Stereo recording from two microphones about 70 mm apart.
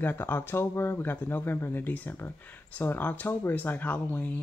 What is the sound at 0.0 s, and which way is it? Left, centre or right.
Speech, left.